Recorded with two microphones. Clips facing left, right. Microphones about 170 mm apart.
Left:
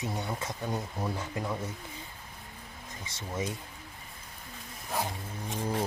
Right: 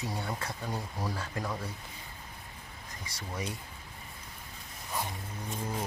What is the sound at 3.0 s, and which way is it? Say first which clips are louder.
Speech: left 4 dB; 25° left (ahead or behind).